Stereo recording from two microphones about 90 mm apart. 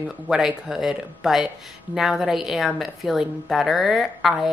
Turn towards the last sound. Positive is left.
turn(degrees=0)  # may be behind; listen again after turning